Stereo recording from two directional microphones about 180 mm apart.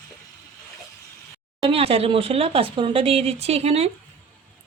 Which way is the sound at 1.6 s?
35° right (ahead or behind).